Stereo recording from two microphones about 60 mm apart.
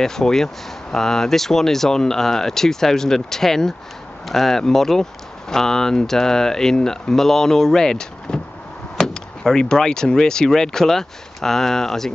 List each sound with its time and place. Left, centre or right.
0.0 s speech: centre